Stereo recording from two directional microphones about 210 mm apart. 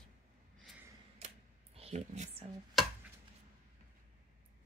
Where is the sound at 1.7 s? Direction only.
30° right (ahead or behind).